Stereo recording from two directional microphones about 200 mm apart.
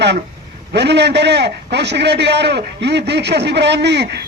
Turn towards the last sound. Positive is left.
turn(degrees=-60)  # may be behind; listen again after turning